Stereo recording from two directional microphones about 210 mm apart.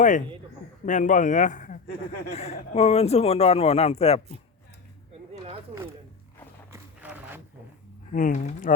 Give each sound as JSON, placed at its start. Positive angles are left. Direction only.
{"t": 0.9, "sound": "a man's voice", "side_deg": 35}
{"t": 6.7, "sound": "a sound", "side_deg": -10}
{"t": 8.1, "sound": "a man's voice", "side_deg": 40}